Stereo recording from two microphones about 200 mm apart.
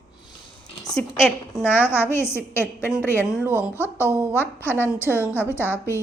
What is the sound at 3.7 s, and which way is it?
A woman's voice, 10° left (ahead or behind).